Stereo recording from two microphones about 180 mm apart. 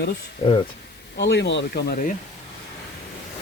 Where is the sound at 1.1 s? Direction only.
75° left (ahead or behind).